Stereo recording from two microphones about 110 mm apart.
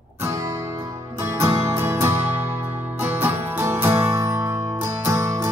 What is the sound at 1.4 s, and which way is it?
Music, 25° right (ahead or behind).